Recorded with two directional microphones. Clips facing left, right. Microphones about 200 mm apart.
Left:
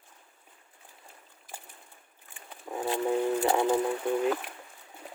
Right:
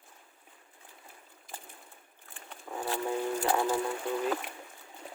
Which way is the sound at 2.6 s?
20° left (ahead or behind).